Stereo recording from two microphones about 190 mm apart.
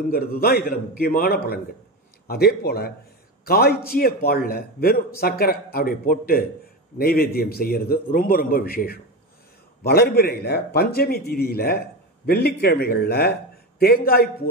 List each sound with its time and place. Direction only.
0.1 s a man's voice: 50° left (ahead or behind)